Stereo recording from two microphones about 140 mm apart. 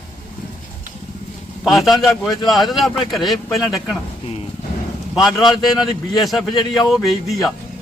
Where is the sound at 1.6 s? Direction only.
Centre (ahead or behind).